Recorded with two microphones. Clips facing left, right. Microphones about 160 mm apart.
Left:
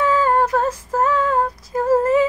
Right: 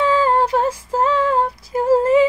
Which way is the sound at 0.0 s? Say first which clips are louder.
Right 1 dB; 30° right (ahead or behind).